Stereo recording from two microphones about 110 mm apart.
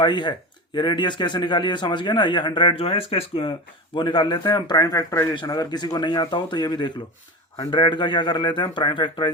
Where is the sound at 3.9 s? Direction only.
45° left (ahead or behind).